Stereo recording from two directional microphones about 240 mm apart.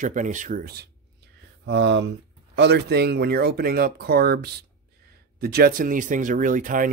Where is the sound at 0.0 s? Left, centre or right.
Right.